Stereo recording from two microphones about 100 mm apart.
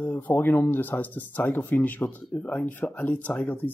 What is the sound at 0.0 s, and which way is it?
Speech, 20° left (ahead or behind).